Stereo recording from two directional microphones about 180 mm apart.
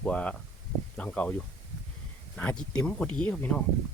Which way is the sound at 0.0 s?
5° left (ahead or behind).